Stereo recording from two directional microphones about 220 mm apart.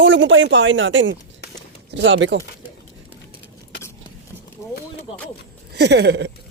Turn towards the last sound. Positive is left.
turn(degrees=-50)  # may be behind; listen again after turning